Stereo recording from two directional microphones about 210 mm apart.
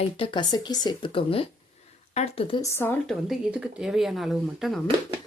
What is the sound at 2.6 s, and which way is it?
Speech, 10° left (ahead or behind).